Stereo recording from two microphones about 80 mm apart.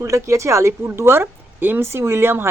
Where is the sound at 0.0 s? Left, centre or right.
Right.